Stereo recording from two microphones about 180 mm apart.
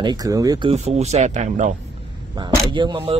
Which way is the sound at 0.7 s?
35° right (ahead or behind).